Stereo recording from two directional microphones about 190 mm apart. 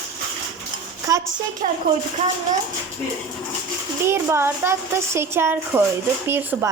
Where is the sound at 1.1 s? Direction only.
15° right (ahead or behind).